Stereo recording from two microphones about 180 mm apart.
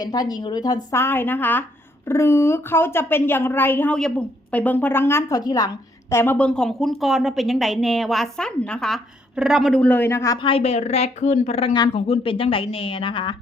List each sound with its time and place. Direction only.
0.0 s a woman's voice: 20° left (ahead or behind)